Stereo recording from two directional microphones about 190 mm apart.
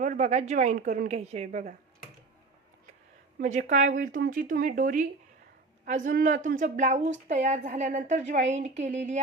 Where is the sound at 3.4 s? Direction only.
40° right (ahead or behind).